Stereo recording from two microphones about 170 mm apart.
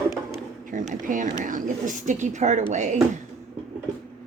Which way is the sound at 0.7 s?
50° right (ahead or behind).